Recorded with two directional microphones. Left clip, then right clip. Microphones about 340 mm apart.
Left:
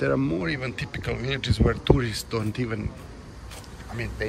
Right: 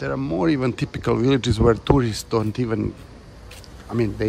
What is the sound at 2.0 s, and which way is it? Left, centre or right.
Speech, centre.